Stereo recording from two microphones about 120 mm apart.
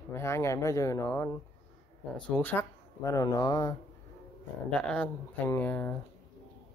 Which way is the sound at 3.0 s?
25° left (ahead or behind).